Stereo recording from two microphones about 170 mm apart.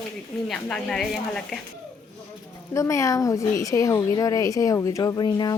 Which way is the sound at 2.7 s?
20° left (ahead or behind).